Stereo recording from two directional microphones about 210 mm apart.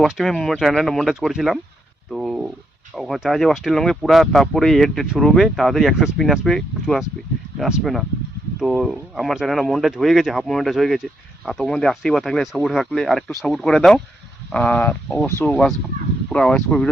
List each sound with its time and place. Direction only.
0.0 s speech: centre (ahead or behind)
2.0 s a sound: centre (ahead or behind)
2.9 s speech: centre (ahead or behind)